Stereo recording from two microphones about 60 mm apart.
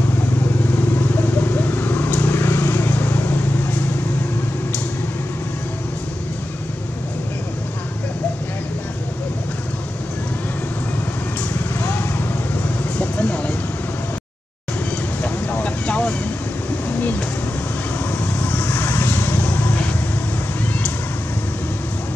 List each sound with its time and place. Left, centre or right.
0.9 s vehicle: left
11.8 s vehicle: left
13.0 s a sound: left
15.2 s vehicle: left
18.2 s vehicle: left